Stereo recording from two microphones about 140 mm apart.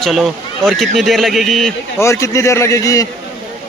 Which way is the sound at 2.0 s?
20° left (ahead or behind).